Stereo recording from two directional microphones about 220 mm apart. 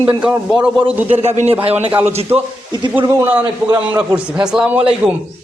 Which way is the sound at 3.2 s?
10° right (ahead or behind).